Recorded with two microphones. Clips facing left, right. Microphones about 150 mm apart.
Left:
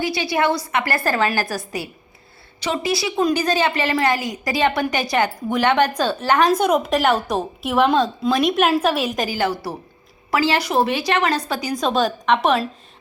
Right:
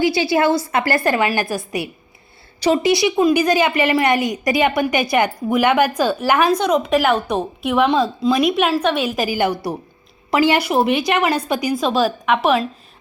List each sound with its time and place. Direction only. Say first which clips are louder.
0.0 s a woman's voice: right 4 dB; 25° right (ahead or behind)
1.5 s a woman's voice: right 3 dB; 30° left (ahead or behind)
2.8 s a woman's voice: right 2 dB; 20° right (ahead or behind)
6.6 s a woman's voice: right 1 dB; 5° left (ahead or behind)